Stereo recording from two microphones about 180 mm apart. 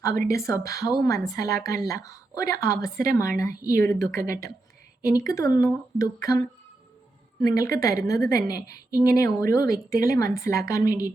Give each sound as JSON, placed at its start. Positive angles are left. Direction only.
{"t": 0.0, "sound": "speech", "side_deg": 15}
{"t": 7.4, "sound": "a woman's voice", "side_deg": 20}